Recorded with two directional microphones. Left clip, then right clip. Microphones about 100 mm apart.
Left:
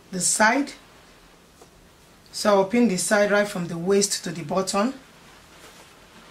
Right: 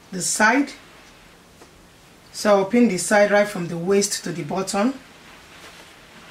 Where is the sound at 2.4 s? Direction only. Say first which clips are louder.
Right 2 dB; 20° left (ahead or behind).